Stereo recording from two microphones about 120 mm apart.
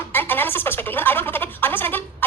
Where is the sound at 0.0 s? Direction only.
15° left (ahead or behind).